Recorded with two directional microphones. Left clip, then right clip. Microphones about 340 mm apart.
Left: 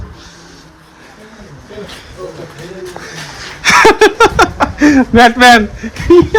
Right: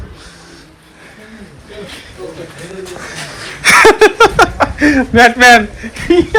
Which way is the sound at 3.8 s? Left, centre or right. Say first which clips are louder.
Even; centre.